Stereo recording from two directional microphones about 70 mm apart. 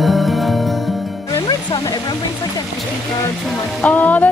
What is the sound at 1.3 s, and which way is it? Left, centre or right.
Music, left.